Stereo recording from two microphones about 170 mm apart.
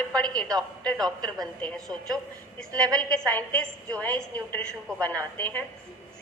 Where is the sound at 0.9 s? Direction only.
20° right (ahead or behind).